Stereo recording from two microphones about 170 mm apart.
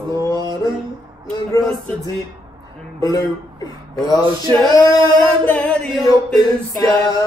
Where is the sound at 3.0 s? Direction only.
25° left (ahead or behind).